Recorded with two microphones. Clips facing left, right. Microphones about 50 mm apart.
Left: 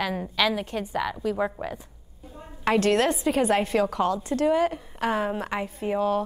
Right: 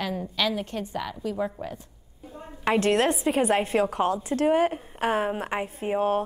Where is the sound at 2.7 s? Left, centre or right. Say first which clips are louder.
Left 1 dB; right.